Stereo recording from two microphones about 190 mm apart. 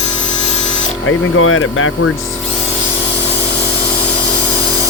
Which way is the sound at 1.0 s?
90° left.